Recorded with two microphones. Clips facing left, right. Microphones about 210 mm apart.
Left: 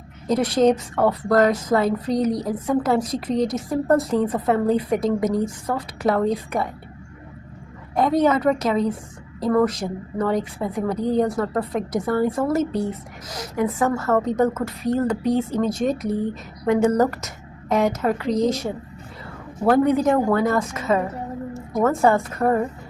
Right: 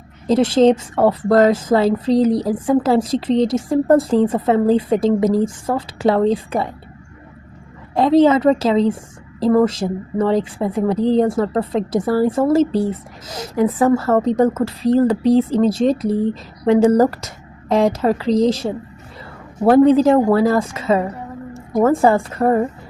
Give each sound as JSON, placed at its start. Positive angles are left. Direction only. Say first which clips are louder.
{"t": 0.3, "sound": "a woman's voice", "louder": "right 5 dB", "side_deg": -30}
{"t": 7.9, "sound": "a woman's voice", "louder": "right 6 dB", "side_deg": -25}